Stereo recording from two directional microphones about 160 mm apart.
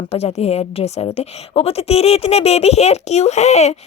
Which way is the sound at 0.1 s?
40° left (ahead or behind).